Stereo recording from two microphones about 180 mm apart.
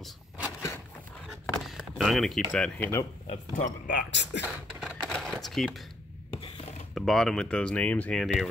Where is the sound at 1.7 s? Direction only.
Centre (ahead or behind).